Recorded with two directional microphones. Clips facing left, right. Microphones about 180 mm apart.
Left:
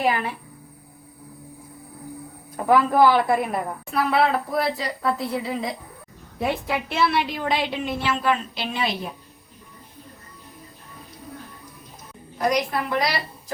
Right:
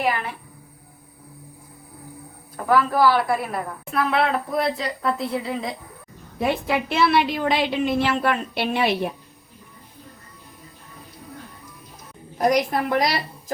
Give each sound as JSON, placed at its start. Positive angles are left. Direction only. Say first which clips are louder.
{"t": 2.6, "sound": "a woman's voice", "louder": "left 2 dB", "side_deg": 15}
{"t": 3.9, "sound": "speech", "louder": "left 1 dB", "side_deg": 0}
{"t": 6.4, "sound": "a woman's voice", "louder": "right 3 dB", "side_deg": -80}
{"t": 12.4, "sound": "a woman's voice", "louder": "right 3 dB", "side_deg": -50}